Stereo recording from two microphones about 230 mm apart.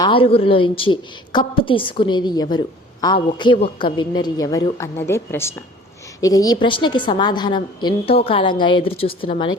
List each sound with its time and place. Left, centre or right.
0.0 s a woman's voice: left